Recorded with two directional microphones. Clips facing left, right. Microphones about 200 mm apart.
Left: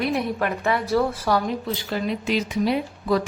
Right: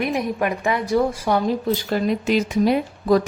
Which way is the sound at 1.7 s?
45° right (ahead or behind).